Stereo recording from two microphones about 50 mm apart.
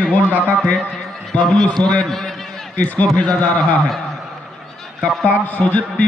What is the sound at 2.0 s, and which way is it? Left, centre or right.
Speech, centre.